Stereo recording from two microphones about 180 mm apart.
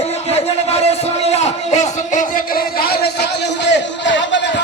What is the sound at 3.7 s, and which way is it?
Speech, 85° left.